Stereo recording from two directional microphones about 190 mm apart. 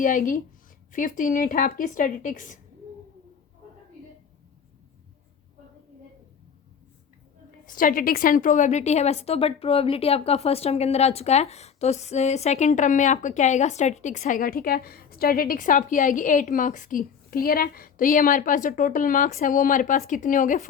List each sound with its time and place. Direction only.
0.0 s a woman's voice: 45° left (ahead or behind)
7.7 s a woman's voice: 45° left (ahead or behind)